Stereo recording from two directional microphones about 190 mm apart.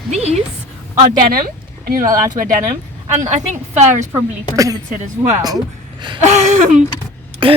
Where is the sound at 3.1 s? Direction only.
35° right (ahead or behind).